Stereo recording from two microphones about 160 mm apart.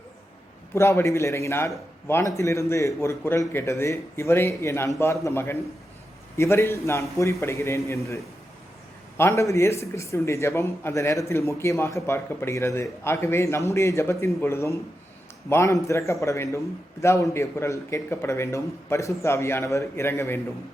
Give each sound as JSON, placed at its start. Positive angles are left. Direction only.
{"t": 0.7, "sound": "a man's voice", "side_deg": 15}